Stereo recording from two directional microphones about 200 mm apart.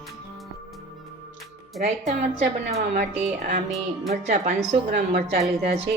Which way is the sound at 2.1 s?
40° right (ahead or behind).